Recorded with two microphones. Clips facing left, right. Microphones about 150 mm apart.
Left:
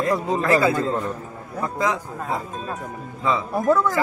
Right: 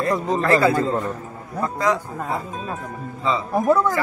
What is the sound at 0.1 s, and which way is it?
Speech, 5° left (ahead or behind).